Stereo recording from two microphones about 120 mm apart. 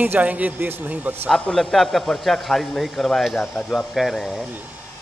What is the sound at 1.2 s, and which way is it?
A man's voice, 10° left (ahead or behind).